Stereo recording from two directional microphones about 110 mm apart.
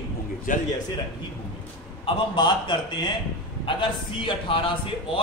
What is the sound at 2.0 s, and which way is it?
A man's voice, 45° left (ahead or behind).